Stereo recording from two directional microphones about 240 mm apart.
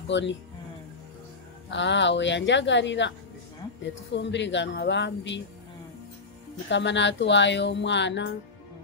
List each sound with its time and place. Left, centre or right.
0.1 s a woman's voice: left
1.7 s a woman's voice: left
6.7 s a woman's voice: left